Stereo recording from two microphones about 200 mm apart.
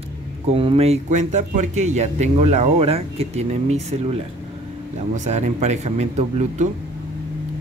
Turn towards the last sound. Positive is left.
turn(degrees=-35)  # may be behind; listen again after turning